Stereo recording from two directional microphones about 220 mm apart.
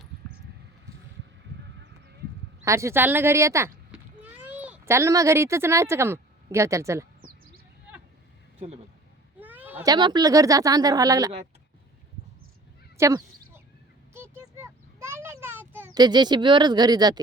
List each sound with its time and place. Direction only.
2.6 s a child's voice: 15° right (ahead or behind)
9.4 s speech: 10° right (ahead or behind)
13.0 s a sound: 15° right (ahead or behind)